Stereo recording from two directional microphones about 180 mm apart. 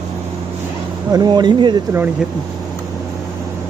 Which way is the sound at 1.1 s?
25° right (ahead or behind).